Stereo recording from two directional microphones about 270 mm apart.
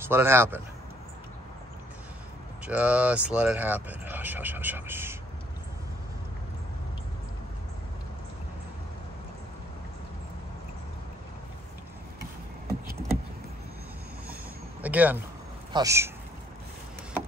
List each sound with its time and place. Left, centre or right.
0.0 s speech: centre
2.6 s speech: centre
12.2 s vehicle: right
14.8 s a sound: centre
15.7 s speech: centre